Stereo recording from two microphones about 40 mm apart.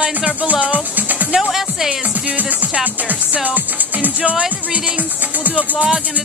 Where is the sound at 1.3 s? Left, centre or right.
Centre.